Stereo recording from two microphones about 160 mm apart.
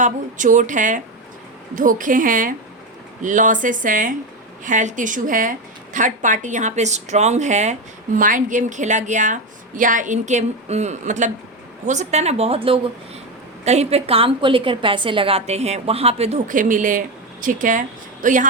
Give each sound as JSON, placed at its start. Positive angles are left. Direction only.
{"t": 0.0, "sound": "a woman's voice", "side_deg": -55}
{"t": 16.5, "sound": "speech", "side_deg": -55}